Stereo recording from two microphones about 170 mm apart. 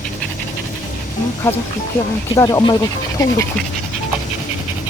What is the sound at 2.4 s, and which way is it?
Speech, 20° left (ahead or behind).